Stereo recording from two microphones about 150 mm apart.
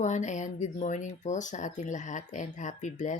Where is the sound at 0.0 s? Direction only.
55° left (ahead or behind).